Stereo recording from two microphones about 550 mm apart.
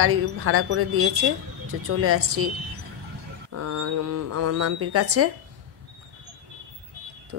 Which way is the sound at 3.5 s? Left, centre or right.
Right.